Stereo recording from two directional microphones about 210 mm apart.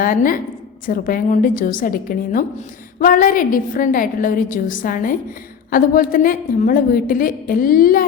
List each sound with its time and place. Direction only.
0.0 s a woman's voice: 40° left (ahead or behind)